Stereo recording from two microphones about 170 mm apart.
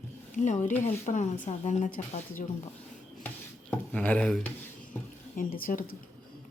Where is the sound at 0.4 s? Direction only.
45° left (ahead or behind).